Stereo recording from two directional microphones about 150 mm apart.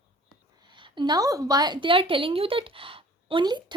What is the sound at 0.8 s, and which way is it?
A woman's voice, 30° right (ahead or behind).